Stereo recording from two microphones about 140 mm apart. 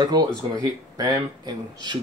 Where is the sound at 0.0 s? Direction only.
30° right (ahead or behind).